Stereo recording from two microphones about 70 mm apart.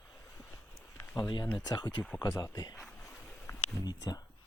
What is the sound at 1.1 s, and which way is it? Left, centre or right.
Speech, left.